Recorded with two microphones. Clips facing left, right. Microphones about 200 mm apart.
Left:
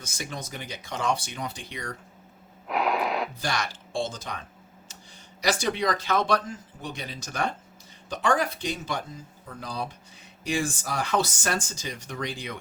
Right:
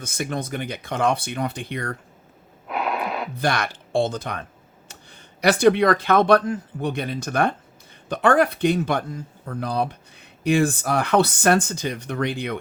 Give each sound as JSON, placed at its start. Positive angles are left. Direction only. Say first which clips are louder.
{"t": 0.0, "sound": "speech", "louder": "right 9 dB", "side_deg": -55}
{"t": 2.6, "sound": "wheeze", "louder": "even", "side_deg": 0}
{"t": 3.3, "sound": "speech", "louder": "right 7 dB", "side_deg": -60}